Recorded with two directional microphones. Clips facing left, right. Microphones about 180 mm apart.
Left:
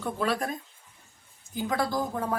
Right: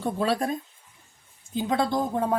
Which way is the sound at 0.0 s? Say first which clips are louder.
Right 3 dB; 30° right (ahead or behind).